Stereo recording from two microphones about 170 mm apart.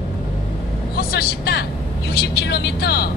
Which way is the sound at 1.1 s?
65° left (ahead or behind).